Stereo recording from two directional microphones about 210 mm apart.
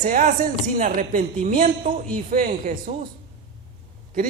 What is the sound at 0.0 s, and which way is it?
A man's voice, 40° right (ahead or behind).